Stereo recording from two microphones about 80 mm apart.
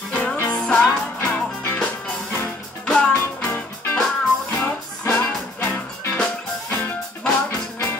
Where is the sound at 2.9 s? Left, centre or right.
Centre.